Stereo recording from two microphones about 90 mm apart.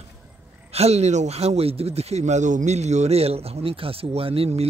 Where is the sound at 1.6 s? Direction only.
90° right.